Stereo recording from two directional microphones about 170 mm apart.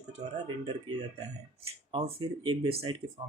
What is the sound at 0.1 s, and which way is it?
Speech, 35° right (ahead or behind).